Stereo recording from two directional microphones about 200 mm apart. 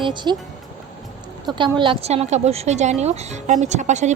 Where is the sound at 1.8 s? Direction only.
30° right (ahead or behind).